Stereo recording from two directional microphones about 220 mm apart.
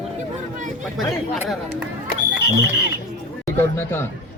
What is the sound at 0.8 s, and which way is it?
Speech, centre (ahead or behind).